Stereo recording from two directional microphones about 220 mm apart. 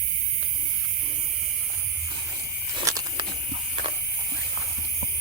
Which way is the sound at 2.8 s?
15° right (ahead or behind).